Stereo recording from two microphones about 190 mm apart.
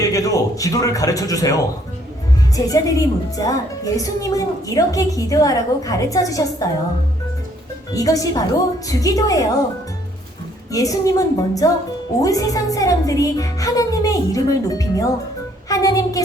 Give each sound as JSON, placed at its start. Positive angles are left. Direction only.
{"t": 0.0, "sound": "a woman's voice", "side_deg": 20}
{"t": 7.9, "sound": "a woman's voice", "side_deg": 20}
{"t": 10.7, "sound": "a woman's voice", "side_deg": 20}
{"t": 15.7, "sound": "music", "side_deg": 20}